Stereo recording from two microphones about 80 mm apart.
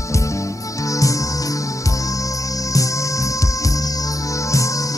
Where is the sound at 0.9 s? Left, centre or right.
Left.